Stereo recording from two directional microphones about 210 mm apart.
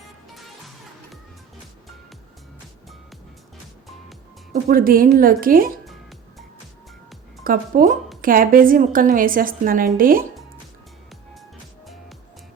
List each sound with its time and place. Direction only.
4.5 s a woman's voice: 40° right (ahead or behind)
5.8 s music: centre (ahead or behind)
7.4 s a woman's voice: 40° right (ahead or behind)